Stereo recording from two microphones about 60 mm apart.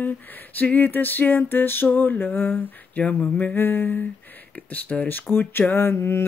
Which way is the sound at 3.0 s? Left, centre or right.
Left.